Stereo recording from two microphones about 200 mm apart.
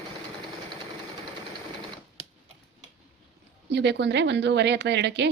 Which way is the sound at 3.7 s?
60° right (ahead or behind).